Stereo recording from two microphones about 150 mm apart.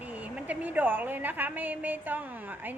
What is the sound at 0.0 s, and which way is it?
A woman's voice, 10° right (ahead or behind).